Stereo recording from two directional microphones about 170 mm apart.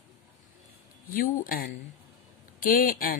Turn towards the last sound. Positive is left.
turn(degrees=55)  # may be behind; listen again after turning